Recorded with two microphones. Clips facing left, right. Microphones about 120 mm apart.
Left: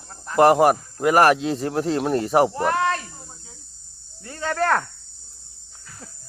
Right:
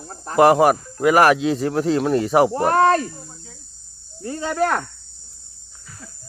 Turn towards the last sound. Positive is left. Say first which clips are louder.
# right 1 dB
turn(degrees=-10)  # may be behind; listen again after turning